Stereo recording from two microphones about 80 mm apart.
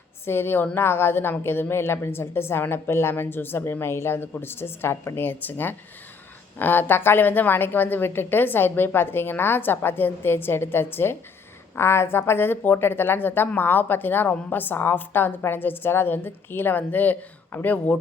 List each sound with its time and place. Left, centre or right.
0.3 s a woman's voice: left